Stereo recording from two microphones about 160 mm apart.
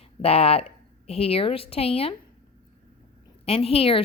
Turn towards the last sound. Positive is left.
turn(degrees=35)  # may be behind; listen again after turning